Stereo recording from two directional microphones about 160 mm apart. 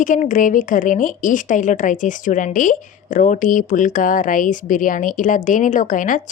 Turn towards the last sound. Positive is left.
turn(degrees=55)  # may be behind; listen again after turning